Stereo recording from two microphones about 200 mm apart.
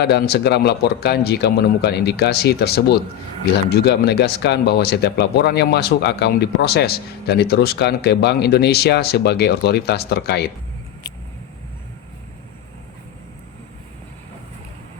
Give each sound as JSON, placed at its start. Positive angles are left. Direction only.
{"t": 0.0, "sound": "speech", "side_deg": 55}